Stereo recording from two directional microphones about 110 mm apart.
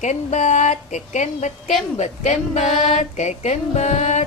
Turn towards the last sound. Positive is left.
turn(degrees=90)